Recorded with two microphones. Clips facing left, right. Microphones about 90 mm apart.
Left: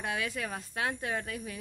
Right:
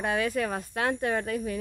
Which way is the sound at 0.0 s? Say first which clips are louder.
Right 7 dB; 45° right (ahead or behind).